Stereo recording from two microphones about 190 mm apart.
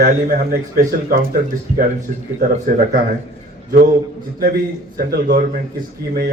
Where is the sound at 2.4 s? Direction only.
45° right (ahead or behind).